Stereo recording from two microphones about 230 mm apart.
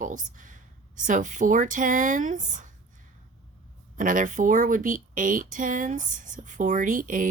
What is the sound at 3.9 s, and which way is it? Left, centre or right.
Speech, right.